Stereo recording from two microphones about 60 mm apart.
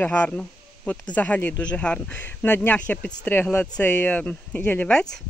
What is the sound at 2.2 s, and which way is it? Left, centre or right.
Speech, left.